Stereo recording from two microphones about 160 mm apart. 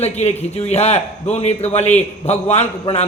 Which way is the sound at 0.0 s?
40° left (ahead or behind).